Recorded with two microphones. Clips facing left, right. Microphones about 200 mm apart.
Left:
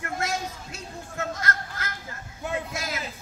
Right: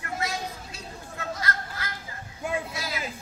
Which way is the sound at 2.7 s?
45° left (ahead or behind).